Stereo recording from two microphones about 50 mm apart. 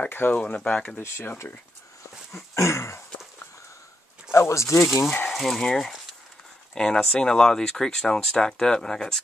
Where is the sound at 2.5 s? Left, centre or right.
Left.